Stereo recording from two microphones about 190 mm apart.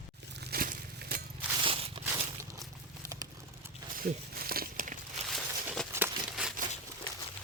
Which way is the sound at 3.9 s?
50° right (ahead or behind).